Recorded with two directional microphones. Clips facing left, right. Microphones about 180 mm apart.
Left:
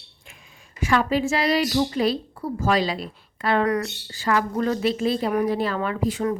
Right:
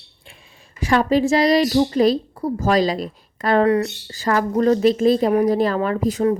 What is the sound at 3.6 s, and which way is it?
Speech, 30° right (ahead or behind).